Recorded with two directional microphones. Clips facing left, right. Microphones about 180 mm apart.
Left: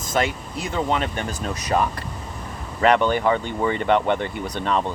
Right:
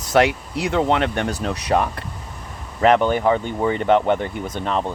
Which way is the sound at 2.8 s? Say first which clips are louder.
Right 2 dB; 45° right (ahead or behind).